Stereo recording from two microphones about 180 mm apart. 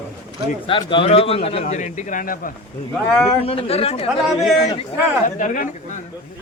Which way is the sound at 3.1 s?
Centre (ahead or behind).